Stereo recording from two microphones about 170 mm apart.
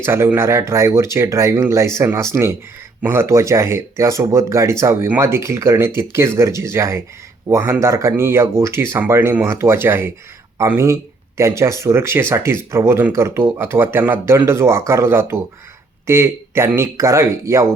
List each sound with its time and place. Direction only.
0.0 s speech: 15° right (ahead or behind)